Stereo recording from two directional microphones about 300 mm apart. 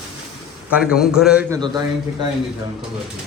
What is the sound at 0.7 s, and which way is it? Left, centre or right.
Speech, centre.